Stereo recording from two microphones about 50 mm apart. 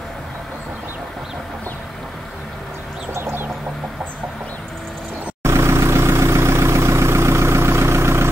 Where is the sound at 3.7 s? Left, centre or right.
Centre.